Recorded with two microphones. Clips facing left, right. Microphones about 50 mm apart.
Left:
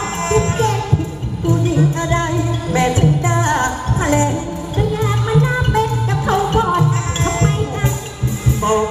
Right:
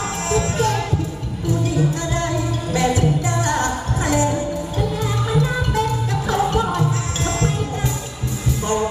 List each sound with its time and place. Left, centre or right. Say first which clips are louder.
0.3 s music: left 3 dB; left